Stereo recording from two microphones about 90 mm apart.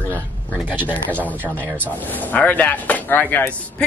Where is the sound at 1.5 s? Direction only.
20° right (ahead or behind).